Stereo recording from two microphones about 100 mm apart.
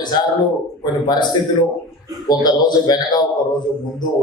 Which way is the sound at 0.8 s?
50° left (ahead or behind).